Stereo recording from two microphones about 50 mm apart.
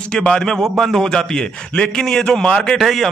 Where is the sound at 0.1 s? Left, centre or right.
Centre.